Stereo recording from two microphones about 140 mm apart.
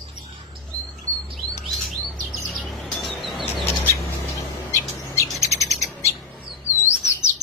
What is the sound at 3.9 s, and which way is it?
Bird, 20° left (ahead or behind).